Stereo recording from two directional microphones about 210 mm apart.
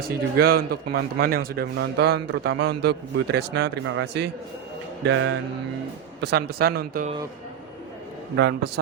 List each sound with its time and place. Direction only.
0.0 s speech: 45° right (ahead or behind)
5.0 s music: 60° right (ahead or behind)
6.1 s speech: 50° right (ahead or behind)
8.4 s speech: 50° right (ahead or behind)